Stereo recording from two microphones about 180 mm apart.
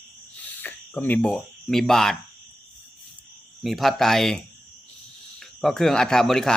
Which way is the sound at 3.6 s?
Centre (ahead or behind).